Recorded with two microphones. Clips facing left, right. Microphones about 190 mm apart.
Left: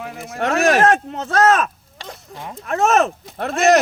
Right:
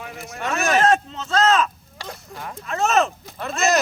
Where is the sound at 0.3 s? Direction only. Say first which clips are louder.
Left 6 dB; 65° left (ahead or behind).